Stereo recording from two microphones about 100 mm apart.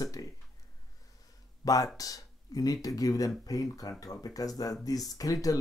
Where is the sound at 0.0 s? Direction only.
35° left (ahead or behind).